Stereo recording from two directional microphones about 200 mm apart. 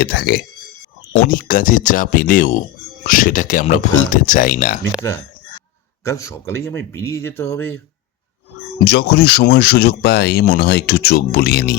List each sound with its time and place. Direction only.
0.0 s speech: 50° left (ahead or behind)
6.1 s speech: 15° left (ahead or behind)
8.8 s speech: 55° left (ahead or behind)